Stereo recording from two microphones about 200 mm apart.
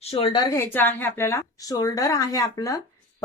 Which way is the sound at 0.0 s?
30° left (ahead or behind).